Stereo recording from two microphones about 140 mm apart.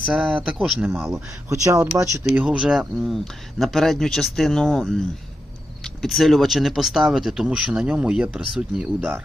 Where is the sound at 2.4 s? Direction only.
5° right (ahead or behind).